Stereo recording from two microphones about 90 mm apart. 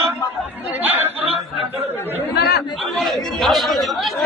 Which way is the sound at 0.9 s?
25° right (ahead or behind).